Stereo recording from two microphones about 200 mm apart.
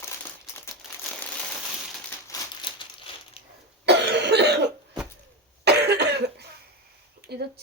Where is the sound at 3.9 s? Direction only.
60° right (ahead or behind).